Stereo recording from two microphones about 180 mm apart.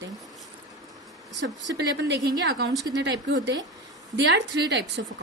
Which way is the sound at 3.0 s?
75° right (ahead or behind).